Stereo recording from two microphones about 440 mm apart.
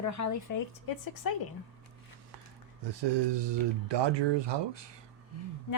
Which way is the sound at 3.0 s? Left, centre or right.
Right.